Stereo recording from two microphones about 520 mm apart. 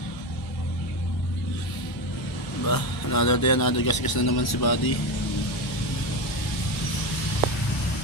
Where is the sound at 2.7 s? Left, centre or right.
Left.